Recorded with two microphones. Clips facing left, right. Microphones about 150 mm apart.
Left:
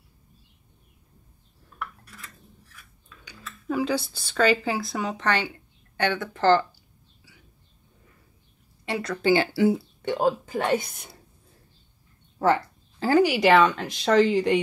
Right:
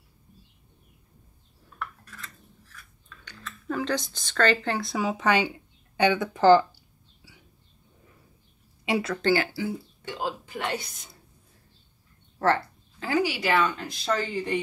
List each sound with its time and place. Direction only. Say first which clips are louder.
1.7 s cutlery: left 1 dB; 10° left (ahead or behind); by 6.6 s 10° right (ahead or behind)
8.8 s speech: right 3 dB; 10° right (ahead or behind)
9.5 s speech: left 10 dB; 70° left (ahead or behind); by 11.1 s 55° left (ahead or behind)
12.4 s speech: left 2 dB; 10° left (ahead or behind)
13.2 s speech: left 7 dB; 90° left